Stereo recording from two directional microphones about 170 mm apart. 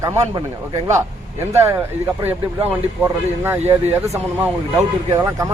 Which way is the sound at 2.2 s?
10° right (ahead or behind).